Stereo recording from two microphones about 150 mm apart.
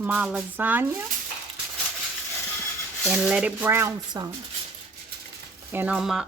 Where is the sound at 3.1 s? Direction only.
5° right (ahead or behind).